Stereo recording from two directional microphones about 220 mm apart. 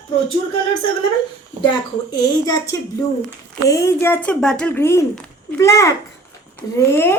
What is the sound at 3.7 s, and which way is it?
Speech, 15° left (ahead or behind).